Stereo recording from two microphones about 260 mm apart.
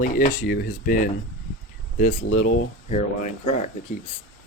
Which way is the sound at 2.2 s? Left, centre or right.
Left.